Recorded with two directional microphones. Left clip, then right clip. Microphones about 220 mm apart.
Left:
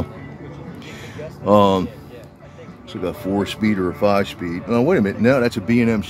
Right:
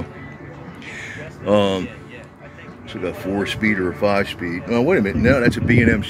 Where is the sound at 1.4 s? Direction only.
20° left (ahead or behind).